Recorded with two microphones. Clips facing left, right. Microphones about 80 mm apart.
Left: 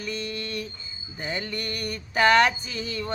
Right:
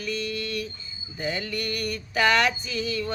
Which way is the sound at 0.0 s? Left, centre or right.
Left.